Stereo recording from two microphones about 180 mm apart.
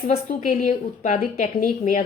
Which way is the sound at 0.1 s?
40° left (ahead or behind).